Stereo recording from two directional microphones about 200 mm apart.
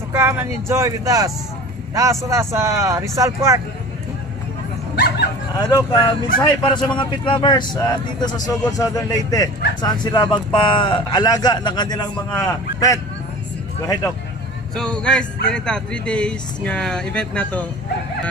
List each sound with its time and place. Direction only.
0.1 s speech: 10° right (ahead or behind)
5.7 s a man's voice: 20° left (ahead or behind)
14.8 s speech: 5° left (ahead or behind)